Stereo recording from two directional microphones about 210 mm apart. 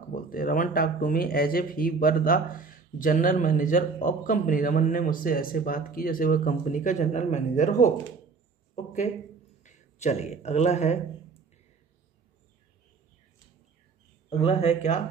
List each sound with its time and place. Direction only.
0.1 s speech: 40° left (ahead or behind)
9.6 s speech: 35° left (ahead or behind)
14.3 s speech: 30° left (ahead or behind)